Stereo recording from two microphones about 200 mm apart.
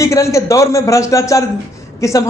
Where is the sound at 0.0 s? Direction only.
15° left (ahead or behind).